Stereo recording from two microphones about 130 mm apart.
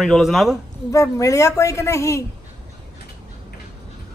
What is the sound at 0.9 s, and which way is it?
A woman's voice, 25° left (ahead or behind).